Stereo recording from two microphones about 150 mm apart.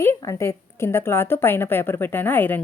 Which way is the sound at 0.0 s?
15° left (ahead or behind).